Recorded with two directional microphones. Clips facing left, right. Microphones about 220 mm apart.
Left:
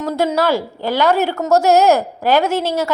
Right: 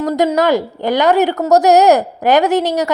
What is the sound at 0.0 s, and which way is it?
A woman's voice, 15° right (ahead or behind).